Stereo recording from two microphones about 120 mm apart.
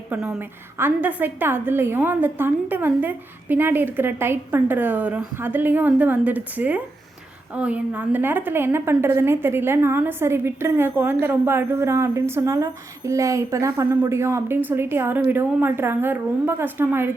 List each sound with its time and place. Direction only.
0.1 s a woman's voice: 10° right (ahead or behind)